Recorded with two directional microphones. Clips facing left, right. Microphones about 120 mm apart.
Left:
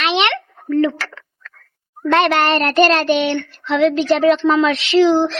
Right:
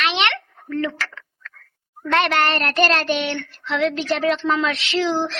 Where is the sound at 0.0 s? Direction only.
15° left (ahead or behind).